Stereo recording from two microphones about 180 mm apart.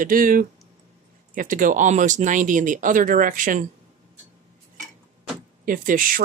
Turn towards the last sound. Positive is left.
turn(degrees=-50)  # may be behind; listen again after turning